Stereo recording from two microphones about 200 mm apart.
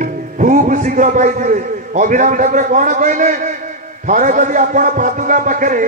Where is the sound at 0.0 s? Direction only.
40° right (ahead or behind).